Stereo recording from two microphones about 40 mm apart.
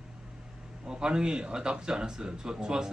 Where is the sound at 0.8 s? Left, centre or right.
Centre.